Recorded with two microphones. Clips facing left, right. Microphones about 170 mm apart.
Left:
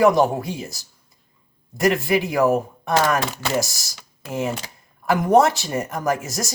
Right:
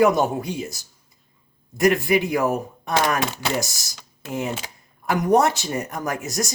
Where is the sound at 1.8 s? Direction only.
Centre (ahead or behind).